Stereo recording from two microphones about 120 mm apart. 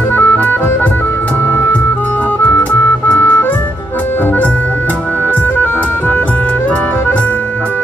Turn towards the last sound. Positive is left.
turn(degrees=15)  # may be behind; listen again after turning